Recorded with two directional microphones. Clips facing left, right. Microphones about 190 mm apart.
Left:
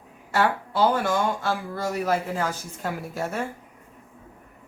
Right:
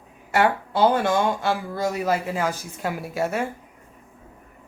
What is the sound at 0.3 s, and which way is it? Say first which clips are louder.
Speech: right 3 dB; 20° right (ahead or behind).